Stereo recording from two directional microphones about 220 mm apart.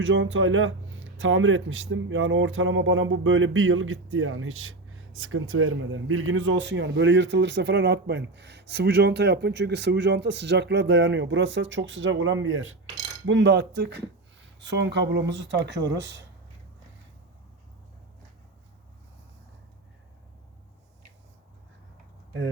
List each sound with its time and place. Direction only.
0.0 s speech: 60° right (ahead or behind)